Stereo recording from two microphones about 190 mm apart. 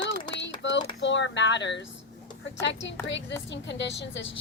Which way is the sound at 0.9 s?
70° left (ahead or behind).